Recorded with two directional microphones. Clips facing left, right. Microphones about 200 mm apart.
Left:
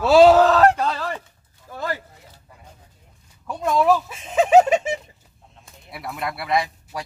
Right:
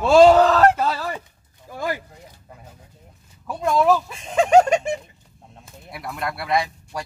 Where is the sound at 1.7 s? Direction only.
15° right (ahead or behind).